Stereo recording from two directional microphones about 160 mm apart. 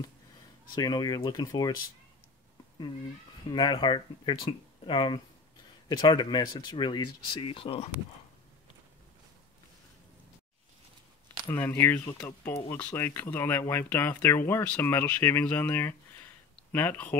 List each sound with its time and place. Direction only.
0.7 s speech: 25° left (ahead or behind)
3.4 s speech: 30° left (ahead or behind)
11.4 s speech: 15° left (ahead or behind)